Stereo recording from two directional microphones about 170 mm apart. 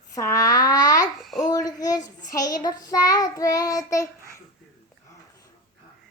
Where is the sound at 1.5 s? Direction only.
20° left (ahead or behind).